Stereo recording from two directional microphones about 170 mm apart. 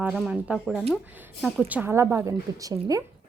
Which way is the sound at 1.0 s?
10° right (ahead or behind).